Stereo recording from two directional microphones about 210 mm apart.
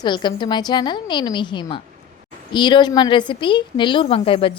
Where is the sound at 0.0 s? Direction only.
20° left (ahead or behind).